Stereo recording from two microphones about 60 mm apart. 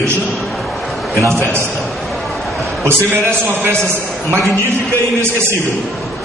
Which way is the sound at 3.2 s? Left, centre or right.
Right.